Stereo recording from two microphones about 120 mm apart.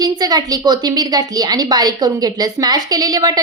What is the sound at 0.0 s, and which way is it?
A woman's voice, 30° right (ahead or behind).